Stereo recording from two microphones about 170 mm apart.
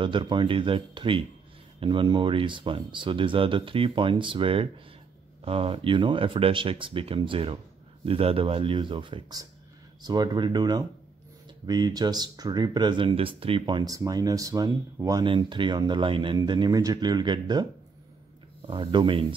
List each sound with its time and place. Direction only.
0.0 s speech: 30° right (ahead or behind)
18.7 s speech: 30° right (ahead or behind)